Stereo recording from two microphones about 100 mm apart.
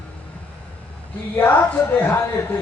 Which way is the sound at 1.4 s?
20° left (ahead or behind).